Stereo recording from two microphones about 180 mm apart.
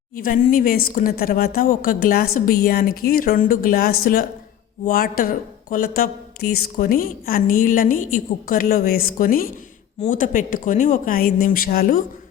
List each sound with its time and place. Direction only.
0.2 s a woman's voice: 50° left (ahead or behind)